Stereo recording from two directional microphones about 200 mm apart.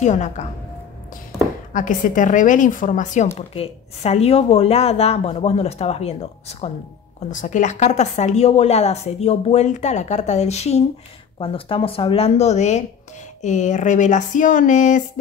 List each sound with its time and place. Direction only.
0.0 s a woman's voice: 35° left (ahead or behind)
1.7 s a woman's voice: 40° left (ahead or behind)